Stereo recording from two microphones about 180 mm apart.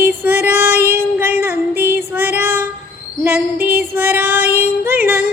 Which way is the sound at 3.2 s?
15° right (ahead or behind).